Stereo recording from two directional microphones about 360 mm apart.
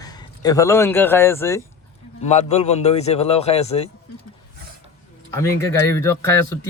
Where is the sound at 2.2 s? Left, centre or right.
Centre.